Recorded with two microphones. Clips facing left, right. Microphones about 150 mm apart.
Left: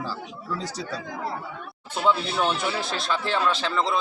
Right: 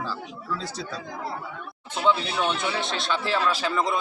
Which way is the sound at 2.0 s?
5° left (ahead or behind).